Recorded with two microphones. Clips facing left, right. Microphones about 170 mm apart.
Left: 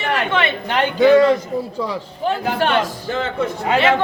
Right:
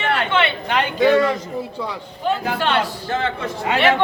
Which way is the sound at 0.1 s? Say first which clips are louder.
Even; 40° left (ahead or behind).